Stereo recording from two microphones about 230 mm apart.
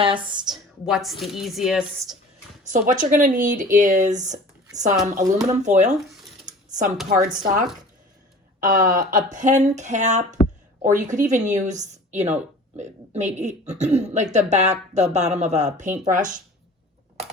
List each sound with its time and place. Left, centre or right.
0.0 s a woman's voice: right
0.9 s a woman's voice: centre
2.6 s speech: right
6.1 s a sound: centre
6.4 s a sound: right
7.2 s speech: right
8.6 s a woman's voice: right